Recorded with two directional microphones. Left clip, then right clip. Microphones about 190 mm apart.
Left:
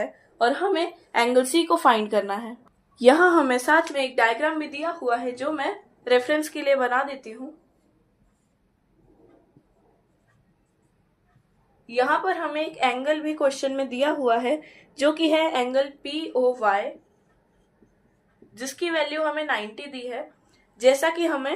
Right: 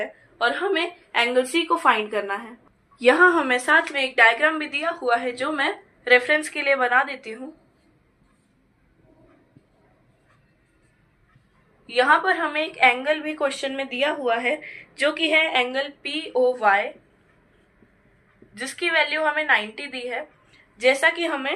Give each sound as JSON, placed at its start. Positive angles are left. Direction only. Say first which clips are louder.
{"t": 0.0, "sound": "a woman's voice", "louder": "left 1 dB", "side_deg": 70}
{"t": 2.9, "sound": "a woman's voice", "louder": "even", "side_deg": 60}
{"t": 6.1, "sound": "a woman's voice", "louder": "right 3 dB", "side_deg": 45}
{"t": 11.9, "sound": "a woman's voice", "louder": "right 4 dB", "side_deg": 30}
{"t": 18.5, "sound": "a woman's voice", "louder": "right 4 dB", "side_deg": 45}
{"t": 20.7, "sound": "a woman's voice", "louder": "right 1 dB", "side_deg": 55}